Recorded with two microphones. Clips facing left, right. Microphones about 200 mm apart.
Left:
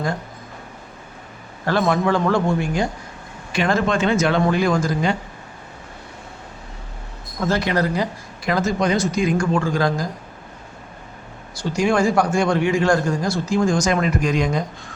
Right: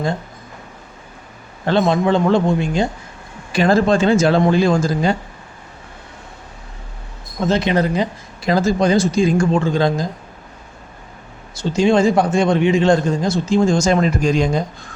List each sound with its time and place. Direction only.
1.6 s a man's voice: 25° right (ahead or behind)
3.5 s speech: 35° right (ahead or behind)
7.3 s a man's voice: 20° right (ahead or behind)
11.5 s a man's voice: 25° right (ahead or behind)